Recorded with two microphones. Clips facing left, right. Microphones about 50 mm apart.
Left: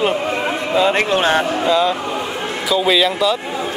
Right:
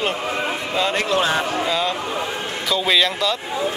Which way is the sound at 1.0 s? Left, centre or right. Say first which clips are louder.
Left 4 dB; left.